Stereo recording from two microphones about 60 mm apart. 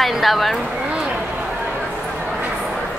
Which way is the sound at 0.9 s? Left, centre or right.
Centre.